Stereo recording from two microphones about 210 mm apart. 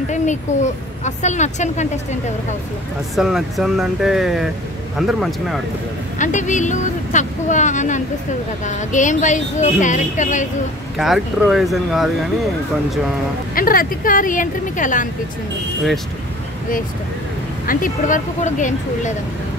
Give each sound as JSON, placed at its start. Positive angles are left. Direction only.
{"t": 0.5, "sound": "a woman's voice", "side_deg": 35}
{"t": 3.2, "sound": "speech", "side_deg": 0}
{"t": 6.1, "sound": "a woman's voice", "side_deg": 35}
{"t": 11.0, "sound": "speech", "side_deg": 0}
{"t": 13.6, "sound": "a woman's voice", "side_deg": 45}
{"t": 17.6, "sound": "a woman's voice", "side_deg": 40}